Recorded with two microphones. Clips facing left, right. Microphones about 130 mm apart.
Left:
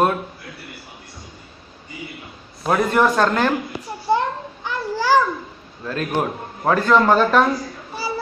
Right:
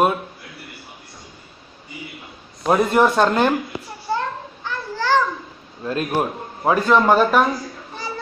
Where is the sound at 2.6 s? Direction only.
20° right (ahead or behind).